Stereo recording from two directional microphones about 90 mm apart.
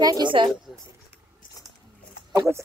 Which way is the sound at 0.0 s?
45° right (ahead or behind).